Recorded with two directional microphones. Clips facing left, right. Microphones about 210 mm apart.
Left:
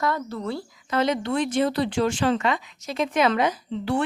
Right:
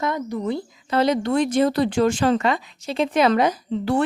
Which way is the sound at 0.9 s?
35° right (ahead or behind).